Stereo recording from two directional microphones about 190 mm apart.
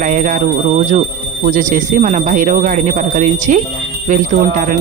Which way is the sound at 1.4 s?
45° right (ahead or behind).